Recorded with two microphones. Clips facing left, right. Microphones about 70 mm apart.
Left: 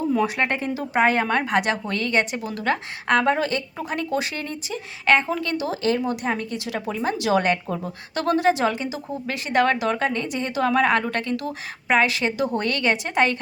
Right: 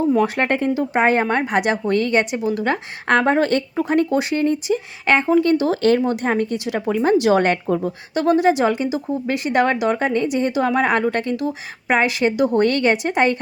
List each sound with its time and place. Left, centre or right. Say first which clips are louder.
0.1 s speech: right 4 dB; right
0.8 s a woman's voice: even; right
3.1 s speech: right 4 dB; right
3.8 s a woman's voice: right 9 dB; right
5.6 s speech: right 6 dB; right
8.1 s a woman's voice: right 4 dB; centre